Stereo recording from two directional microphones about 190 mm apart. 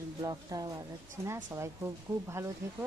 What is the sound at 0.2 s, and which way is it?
Speech, 20° right (ahead or behind).